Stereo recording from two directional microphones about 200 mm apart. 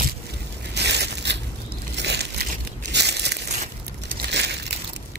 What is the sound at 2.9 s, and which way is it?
Crumpling, 55° right (ahead or behind).